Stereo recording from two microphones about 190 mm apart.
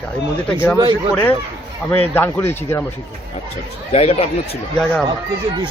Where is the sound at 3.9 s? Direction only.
35° left (ahead or behind).